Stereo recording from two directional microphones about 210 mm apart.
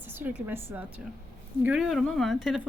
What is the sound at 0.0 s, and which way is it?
A woman's voice, 10° right (ahead or behind).